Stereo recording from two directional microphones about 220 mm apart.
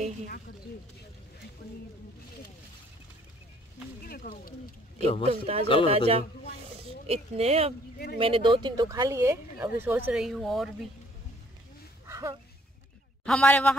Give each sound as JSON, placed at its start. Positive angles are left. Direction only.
{"t": 4.0, "sound": "speech", "side_deg": 45}
{"t": 4.9, "sound": "a man's voice", "side_deg": 25}
{"t": 5.2, "sound": "speech", "side_deg": -30}
{"t": 12.1, "sound": "a sound", "side_deg": -15}
{"t": 13.2, "sound": "a man's voice", "side_deg": 5}